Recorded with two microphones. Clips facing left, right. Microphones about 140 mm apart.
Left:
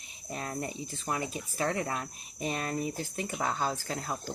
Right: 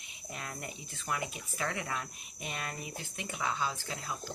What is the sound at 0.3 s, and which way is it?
Speech, 35° left (ahead or behind).